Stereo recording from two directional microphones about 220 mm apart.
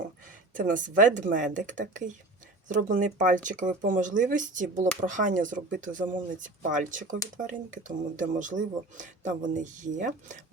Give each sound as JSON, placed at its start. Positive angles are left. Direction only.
{"t": 0.5, "sound": "speech", "side_deg": -35}